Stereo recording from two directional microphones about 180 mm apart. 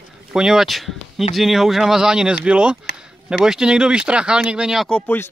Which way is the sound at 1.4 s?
Centre (ahead or behind).